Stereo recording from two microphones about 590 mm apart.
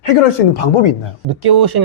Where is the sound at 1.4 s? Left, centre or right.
Right.